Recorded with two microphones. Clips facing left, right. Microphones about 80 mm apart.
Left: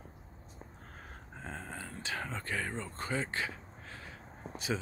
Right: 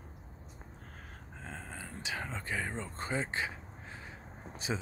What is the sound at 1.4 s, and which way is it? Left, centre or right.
Speech, centre.